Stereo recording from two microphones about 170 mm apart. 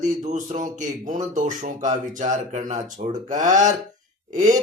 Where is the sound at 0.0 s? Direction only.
45° right (ahead or behind).